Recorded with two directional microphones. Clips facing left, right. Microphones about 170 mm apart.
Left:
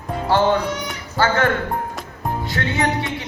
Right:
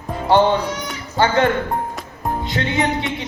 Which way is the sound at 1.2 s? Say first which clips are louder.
Right 2 dB; 20° right (ahead or behind).